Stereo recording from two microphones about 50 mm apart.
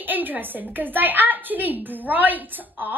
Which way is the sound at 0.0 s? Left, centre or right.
Right.